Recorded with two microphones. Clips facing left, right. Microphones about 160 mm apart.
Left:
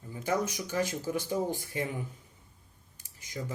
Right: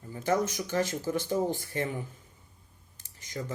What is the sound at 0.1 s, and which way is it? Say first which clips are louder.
Speech: right 3 dB; 10° left (ahead or behind).